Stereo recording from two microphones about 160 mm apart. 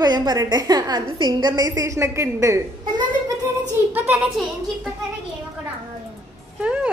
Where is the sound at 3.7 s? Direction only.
10° right (ahead or behind).